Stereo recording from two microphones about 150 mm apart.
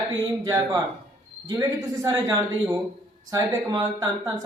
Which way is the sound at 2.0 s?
25° right (ahead or behind).